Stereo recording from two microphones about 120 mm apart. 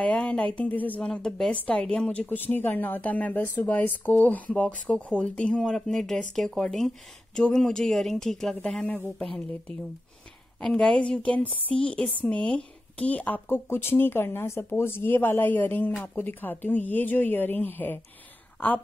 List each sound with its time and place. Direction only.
0.0 s a woman's voice: 10° left (ahead or behind)